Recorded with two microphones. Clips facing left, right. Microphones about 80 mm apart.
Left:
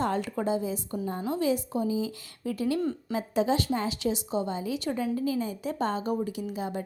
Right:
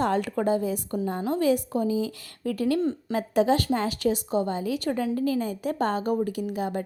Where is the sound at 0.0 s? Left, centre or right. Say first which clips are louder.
Right 4 dB; right.